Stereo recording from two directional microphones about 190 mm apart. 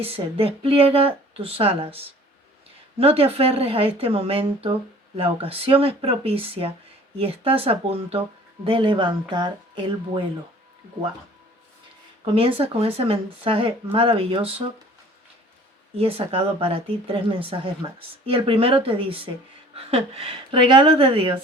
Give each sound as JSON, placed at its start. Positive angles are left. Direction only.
{"t": 0.0, "sound": "speech", "side_deg": -30}
{"t": 12.2, "sound": "speech", "side_deg": -30}
{"t": 16.0, "sound": "speech", "side_deg": -30}